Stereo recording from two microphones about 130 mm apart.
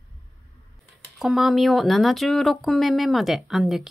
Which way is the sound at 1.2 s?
Centre (ahead or behind).